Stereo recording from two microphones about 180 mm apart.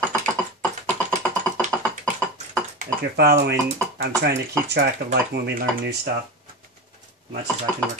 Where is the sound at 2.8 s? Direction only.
65° right (ahead or behind).